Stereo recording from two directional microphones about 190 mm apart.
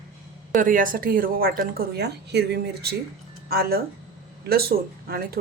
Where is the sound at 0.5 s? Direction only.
45° right (ahead or behind).